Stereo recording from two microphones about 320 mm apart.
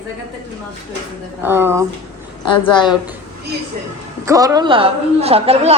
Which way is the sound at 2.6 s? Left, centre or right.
Centre.